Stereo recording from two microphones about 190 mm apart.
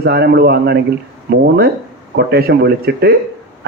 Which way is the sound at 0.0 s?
60° right (ahead or behind).